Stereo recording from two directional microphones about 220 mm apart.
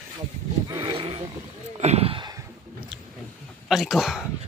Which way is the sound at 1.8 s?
30° right (ahead or behind).